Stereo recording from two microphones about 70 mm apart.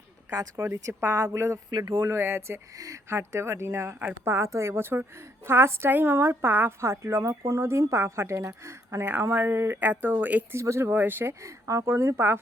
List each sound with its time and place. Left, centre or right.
0.5 s speech: right
2.7 s speech: right
3.1 s speech: right
6.8 s speech: right
10.5 s speech: right
11.4 s speech: right